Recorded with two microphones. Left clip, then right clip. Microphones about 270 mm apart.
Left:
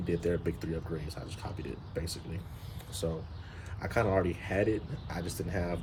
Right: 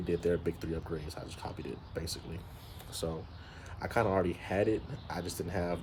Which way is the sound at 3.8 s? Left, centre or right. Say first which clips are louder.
Left 1 dB; centre.